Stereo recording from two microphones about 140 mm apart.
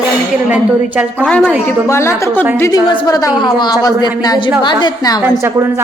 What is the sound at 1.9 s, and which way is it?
A woman's voice, 20° left (ahead or behind).